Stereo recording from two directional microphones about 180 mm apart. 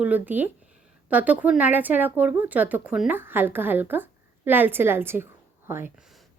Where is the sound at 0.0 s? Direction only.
10° right (ahead or behind).